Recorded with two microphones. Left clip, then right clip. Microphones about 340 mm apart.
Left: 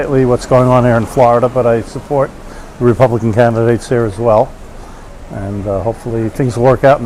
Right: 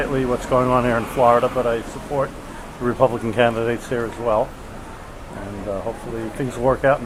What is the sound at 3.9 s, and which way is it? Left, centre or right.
Speech, left.